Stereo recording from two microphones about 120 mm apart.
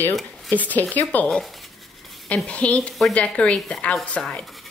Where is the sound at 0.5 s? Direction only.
15° left (ahead or behind).